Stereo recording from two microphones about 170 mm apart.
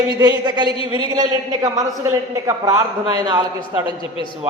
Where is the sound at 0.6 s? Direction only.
30° left (ahead or behind).